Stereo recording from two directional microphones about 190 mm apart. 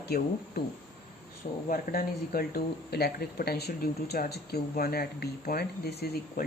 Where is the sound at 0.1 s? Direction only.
55° left (ahead or behind).